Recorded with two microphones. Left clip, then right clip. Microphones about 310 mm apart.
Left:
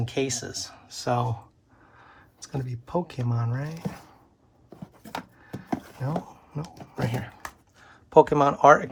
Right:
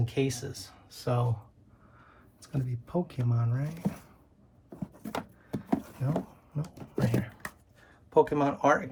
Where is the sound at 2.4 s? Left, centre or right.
Left.